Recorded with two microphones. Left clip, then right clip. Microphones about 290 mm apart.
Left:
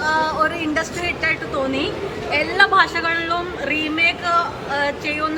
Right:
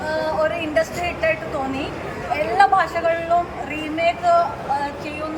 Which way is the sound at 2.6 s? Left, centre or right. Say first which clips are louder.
Left 1 dB; centre.